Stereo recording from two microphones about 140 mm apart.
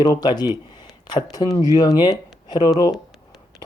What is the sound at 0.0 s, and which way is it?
Speech, 30° left (ahead or behind).